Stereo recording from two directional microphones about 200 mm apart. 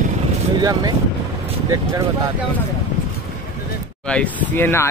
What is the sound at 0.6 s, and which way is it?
Speech, 20° right (ahead or behind).